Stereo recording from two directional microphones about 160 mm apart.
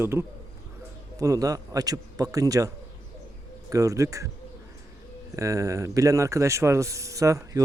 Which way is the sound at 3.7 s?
20° right (ahead or behind).